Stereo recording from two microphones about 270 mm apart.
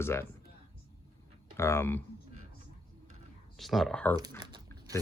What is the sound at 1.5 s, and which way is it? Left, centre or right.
Speech, centre.